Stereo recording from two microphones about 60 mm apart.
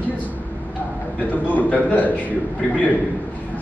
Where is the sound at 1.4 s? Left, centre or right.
Left.